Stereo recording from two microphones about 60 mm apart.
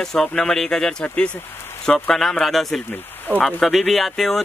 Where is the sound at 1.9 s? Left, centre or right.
Centre.